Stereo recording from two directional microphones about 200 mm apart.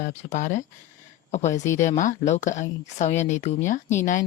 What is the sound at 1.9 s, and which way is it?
Speech, 35° left (ahead or behind).